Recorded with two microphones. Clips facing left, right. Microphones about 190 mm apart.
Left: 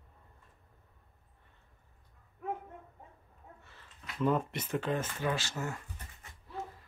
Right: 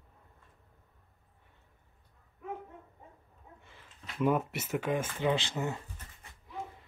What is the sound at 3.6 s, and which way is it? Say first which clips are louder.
Speech: right 1 dB; 15° right (ahead or behind).